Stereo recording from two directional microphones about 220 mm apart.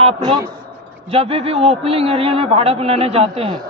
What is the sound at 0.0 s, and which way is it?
A man's voice, 25° right (ahead or behind).